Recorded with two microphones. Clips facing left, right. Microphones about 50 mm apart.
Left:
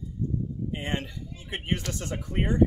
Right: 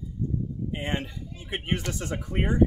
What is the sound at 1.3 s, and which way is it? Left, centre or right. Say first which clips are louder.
Speech: right 1 dB; right.